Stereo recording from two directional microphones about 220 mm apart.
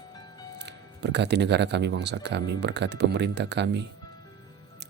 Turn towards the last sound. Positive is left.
turn(degrees=-50)  # may be behind; listen again after turning